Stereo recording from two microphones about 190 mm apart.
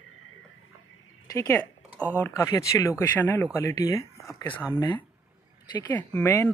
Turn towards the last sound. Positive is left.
turn(degrees=10)  # may be behind; listen again after turning